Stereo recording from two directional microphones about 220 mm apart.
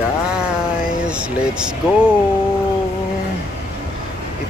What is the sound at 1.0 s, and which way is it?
Speech, 5° right (ahead or behind).